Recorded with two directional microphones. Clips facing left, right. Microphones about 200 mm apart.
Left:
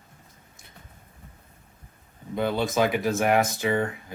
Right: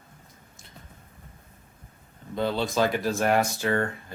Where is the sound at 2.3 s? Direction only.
15° left (ahead or behind).